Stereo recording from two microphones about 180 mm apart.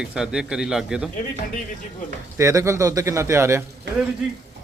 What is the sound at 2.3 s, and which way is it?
A man's voice, 15° right (ahead or behind).